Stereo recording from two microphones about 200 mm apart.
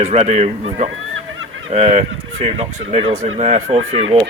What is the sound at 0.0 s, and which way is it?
Speech, 35° right (ahead or behind).